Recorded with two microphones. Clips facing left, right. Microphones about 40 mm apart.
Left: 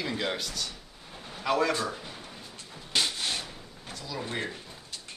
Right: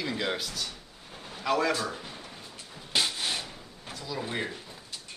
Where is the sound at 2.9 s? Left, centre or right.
Centre.